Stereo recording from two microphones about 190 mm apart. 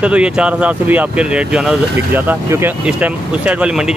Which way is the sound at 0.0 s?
5° right (ahead or behind).